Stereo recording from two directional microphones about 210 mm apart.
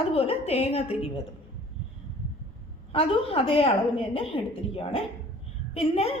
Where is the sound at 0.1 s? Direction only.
25° left (ahead or behind).